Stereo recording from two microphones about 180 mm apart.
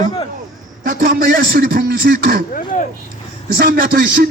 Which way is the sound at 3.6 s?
60° right (ahead or behind).